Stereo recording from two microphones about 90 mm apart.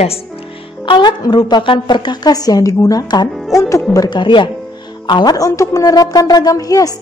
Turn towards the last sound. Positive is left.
turn(degrees=40)  # may be behind; listen again after turning